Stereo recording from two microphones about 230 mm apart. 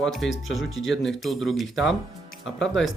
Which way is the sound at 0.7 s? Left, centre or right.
Left.